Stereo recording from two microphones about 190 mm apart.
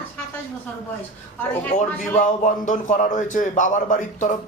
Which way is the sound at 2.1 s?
40° left (ahead or behind).